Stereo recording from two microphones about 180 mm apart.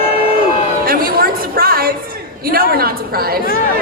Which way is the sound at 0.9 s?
55° right (ahead or behind).